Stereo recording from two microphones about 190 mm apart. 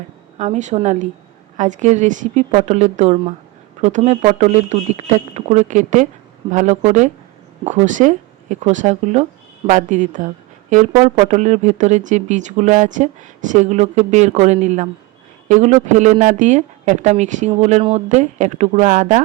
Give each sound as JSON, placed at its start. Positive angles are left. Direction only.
{"t": 0.3, "sound": "speech", "side_deg": -40}